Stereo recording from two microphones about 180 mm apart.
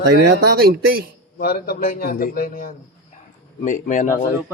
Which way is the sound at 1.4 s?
60° left (ahead or behind).